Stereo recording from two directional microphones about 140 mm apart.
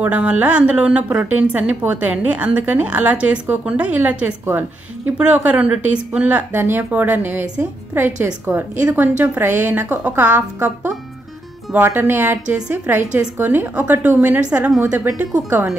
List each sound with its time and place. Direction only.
0.0 s a woman's voice: 10° right (ahead or behind)